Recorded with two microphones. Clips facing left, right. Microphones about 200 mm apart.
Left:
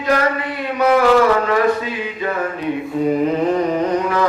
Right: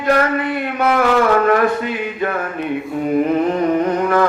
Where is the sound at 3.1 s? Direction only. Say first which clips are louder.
Right 4 dB; 50° right (ahead or behind).